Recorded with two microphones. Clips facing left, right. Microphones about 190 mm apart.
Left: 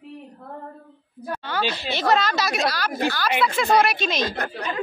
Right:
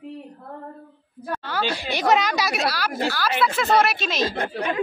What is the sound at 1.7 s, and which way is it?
Speech, 15° right (ahead or behind).